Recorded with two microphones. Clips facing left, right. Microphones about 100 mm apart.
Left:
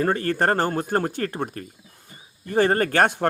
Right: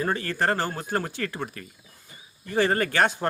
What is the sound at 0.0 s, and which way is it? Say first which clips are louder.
Speech: left 4 dB; 45° left (ahead or behind).